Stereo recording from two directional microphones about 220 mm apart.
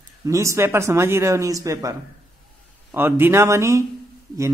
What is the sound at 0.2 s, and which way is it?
A man's voice, 15° right (ahead or behind).